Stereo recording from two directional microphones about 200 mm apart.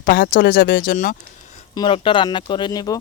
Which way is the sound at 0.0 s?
50° left (ahead or behind).